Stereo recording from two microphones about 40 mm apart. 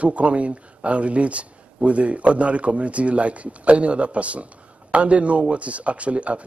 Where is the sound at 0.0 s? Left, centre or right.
Right.